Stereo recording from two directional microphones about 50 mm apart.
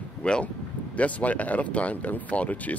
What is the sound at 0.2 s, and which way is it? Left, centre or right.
Speech, left.